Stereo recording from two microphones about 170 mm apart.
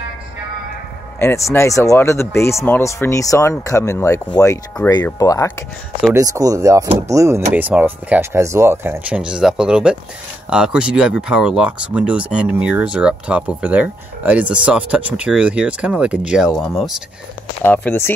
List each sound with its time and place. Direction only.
1.2 s speech: 15° left (ahead or behind)
6.1 s speech: 20° right (ahead or behind); by 17.0 s centre (ahead or behind)
17.6 s speech: 10° left (ahead or behind)